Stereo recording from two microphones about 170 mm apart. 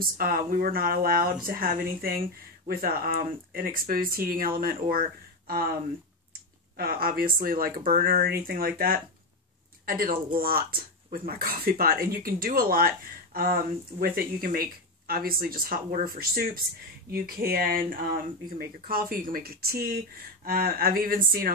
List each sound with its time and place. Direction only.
0.0 s speech: 60° right (ahead or behind)
6.8 s speech: 60° right (ahead or behind)